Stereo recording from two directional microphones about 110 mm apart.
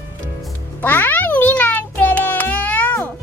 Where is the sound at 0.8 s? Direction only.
15° left (ahead or behind).